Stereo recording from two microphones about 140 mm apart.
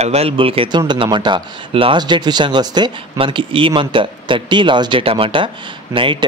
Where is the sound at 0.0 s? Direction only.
45° right (ahead or behind).